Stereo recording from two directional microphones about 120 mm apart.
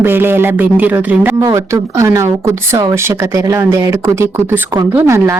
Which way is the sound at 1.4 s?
25° right (ahead or behind).